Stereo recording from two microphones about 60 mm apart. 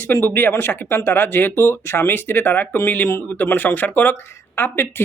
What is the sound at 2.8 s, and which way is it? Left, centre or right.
Speech, left.